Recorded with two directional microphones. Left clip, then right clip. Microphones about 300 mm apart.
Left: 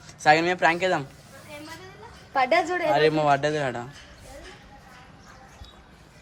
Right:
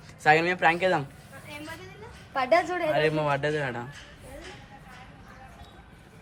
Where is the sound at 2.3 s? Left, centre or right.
Left.